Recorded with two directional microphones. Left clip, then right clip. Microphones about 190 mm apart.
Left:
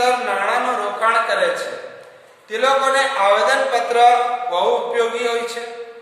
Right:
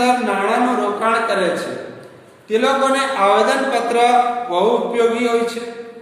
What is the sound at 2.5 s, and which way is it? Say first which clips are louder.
Speech: right 1 dB; 15° right (ahead or behind).